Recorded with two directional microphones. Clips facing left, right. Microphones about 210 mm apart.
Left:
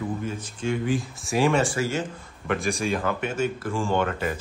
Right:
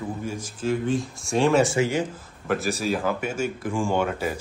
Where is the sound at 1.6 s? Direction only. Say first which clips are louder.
Right 3 dB; 20° right (ahead or behind).